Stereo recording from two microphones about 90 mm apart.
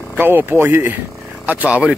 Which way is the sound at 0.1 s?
25° right (ahead or behind).